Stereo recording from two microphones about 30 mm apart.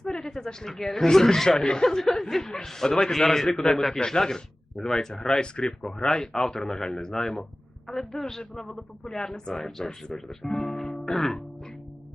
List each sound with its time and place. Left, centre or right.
0.3 s a woman's voice: centre
4.0 s speech: left
5.4 s speech: left
6.3 s speech: centre
9.0 s speech: left
9.6 s speech: centre
11.0 s music: centre